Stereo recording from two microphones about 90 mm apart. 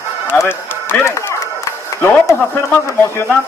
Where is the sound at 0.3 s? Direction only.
25° left (ahead or behind).